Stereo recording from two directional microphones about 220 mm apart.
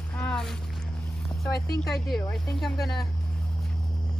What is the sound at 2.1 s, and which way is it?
Speech, 5° left (ahead or behind).